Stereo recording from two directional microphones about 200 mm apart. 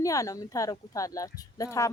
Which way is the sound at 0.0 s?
15° left (ahead or behind).